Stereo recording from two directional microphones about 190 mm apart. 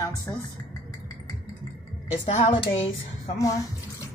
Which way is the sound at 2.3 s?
35° left (ahead or behind).